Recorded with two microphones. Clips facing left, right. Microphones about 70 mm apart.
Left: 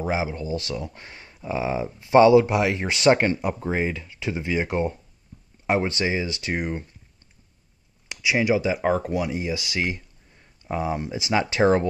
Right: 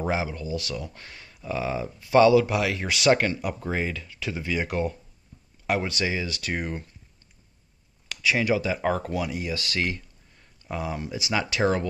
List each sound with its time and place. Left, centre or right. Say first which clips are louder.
0.1 s speech: left 2 dB; left
8.1 s speech: left 2 dB; centre